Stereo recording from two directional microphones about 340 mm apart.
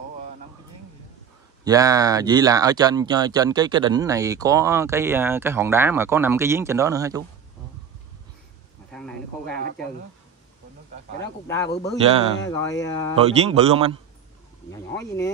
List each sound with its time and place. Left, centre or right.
1.6 s speech: centre
8.9 s speech: centre
11.1 s speech: centre
13.1 s speech: centre
14.7 s speech: centre